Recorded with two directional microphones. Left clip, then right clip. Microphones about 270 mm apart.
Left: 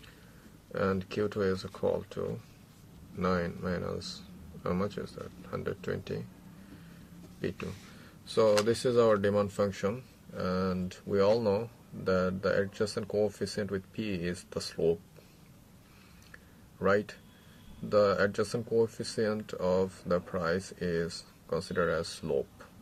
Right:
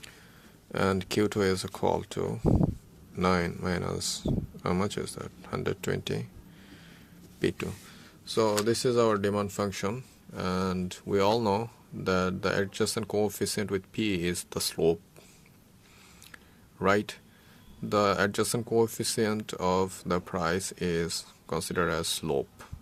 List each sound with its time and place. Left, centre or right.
0.7 s speech: right
7.4 s speech: right
16.8 s speech: right